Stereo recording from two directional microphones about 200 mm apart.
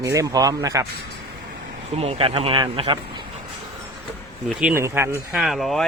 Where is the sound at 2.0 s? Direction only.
30° right (ahead or behind).